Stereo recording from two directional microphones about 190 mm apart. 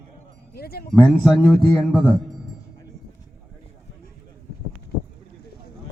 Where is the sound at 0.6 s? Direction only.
55° left (ahead or behind).